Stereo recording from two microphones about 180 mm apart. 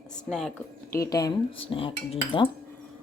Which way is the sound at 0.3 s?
5° left (ahead or behind).